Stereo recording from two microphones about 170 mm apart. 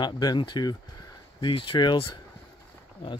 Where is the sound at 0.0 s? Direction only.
25° left (ahead or behind).